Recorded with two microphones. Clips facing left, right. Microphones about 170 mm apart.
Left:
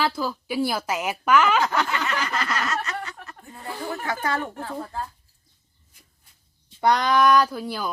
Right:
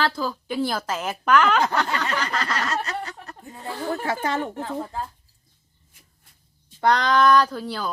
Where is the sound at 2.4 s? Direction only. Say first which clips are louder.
Even; 30° right (ahead or behind).